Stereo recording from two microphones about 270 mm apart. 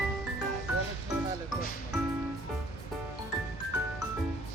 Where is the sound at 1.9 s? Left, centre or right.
Centre.